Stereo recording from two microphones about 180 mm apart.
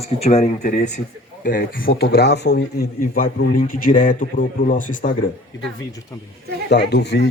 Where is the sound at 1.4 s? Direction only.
50° left (ahead or behind).